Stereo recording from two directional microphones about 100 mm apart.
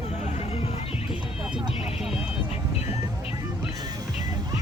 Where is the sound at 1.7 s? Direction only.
80° left.